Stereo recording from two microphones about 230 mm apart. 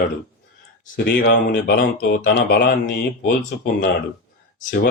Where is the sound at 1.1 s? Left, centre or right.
Left.